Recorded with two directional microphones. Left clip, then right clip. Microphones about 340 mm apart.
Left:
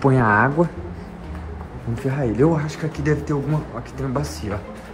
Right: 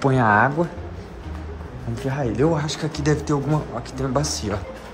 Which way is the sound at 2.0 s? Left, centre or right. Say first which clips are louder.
Left 2 dB; centre.